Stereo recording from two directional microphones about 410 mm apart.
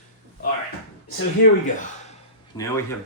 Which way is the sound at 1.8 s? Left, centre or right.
Centre.